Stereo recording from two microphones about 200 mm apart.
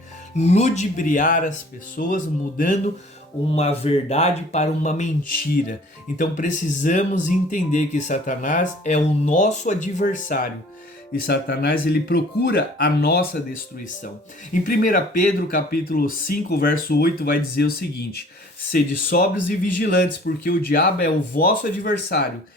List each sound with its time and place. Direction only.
0.3 s speech: 35° left (ahead or behind)
6.1 s speech: 40° left (ahead or behind)
11.1 s speech: 55° left (ahead or behind)
14.6 s speech: 40° left (ahead or behind)